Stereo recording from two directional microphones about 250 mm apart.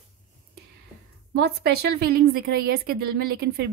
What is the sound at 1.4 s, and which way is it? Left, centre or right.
Speech, right.